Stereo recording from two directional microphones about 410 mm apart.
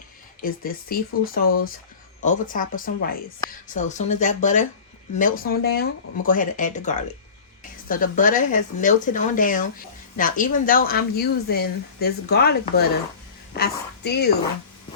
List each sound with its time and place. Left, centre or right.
0.4 s a woman's voice: left